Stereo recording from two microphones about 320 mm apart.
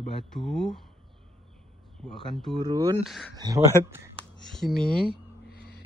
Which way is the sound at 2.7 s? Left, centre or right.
Centre.